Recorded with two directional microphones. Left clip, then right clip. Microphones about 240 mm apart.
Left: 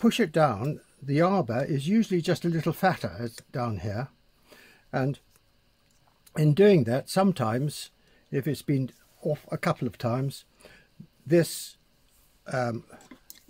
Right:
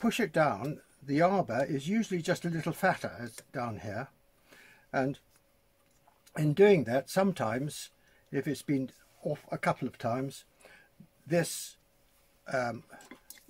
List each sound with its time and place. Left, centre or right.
0.0 s speech: left
3.5 s a sound: left
6.3 s speech: left